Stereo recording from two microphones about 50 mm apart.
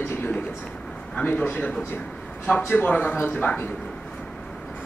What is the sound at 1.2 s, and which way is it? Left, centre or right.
A man's voice, left.